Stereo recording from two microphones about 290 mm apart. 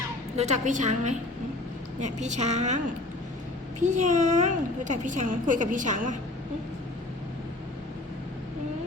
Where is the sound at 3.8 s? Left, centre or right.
Right.